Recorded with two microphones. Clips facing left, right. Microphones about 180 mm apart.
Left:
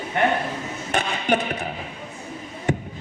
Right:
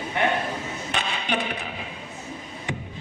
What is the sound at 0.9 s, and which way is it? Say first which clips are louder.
Music: left 6 dB; 45° left (ahead or behind).